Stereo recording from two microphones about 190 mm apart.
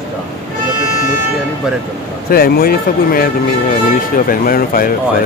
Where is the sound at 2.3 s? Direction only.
50° left (ahead or behind).